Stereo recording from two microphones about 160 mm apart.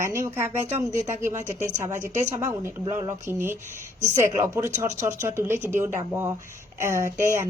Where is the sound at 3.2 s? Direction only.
15° right (ahead or behind).